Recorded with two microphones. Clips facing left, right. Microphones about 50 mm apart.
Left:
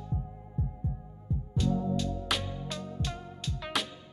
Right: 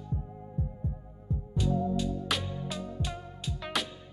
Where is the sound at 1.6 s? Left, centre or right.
Centre.